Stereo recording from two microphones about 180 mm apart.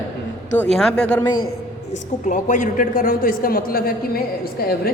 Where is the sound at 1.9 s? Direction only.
45° left (ahead or behind).